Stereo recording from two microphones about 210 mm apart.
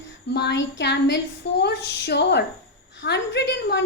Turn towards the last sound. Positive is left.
turn(degrees=55)  # may be behind; listen again after turning